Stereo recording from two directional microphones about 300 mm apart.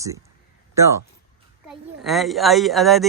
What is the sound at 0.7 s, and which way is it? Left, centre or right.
A woman's voice, centre.